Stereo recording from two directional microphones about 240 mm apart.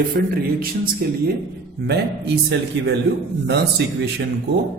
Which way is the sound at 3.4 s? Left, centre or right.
Right.